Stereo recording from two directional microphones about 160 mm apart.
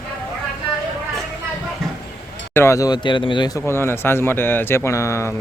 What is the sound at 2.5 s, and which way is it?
Speech, 15° left (ahead or behind).